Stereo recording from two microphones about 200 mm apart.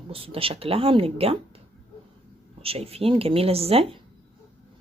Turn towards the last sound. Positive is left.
turn(degrees=-30)  # may be behind; listen again after turning